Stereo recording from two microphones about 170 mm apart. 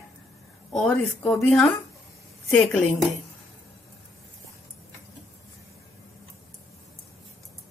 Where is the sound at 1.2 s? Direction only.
5° left (ahead or behind).